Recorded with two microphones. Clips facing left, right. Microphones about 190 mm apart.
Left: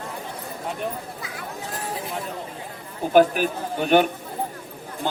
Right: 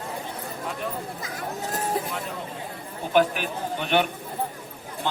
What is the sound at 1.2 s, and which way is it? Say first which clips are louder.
Speech: right 2 dB; 40° right (ahead or behind).